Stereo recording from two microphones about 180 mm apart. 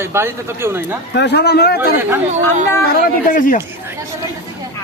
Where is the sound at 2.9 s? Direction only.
50° left (ahead or behind).